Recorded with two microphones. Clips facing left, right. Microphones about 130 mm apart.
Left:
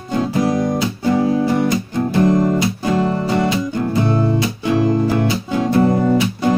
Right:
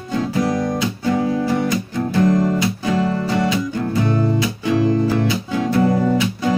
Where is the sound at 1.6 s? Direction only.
30° left (ahead or behind).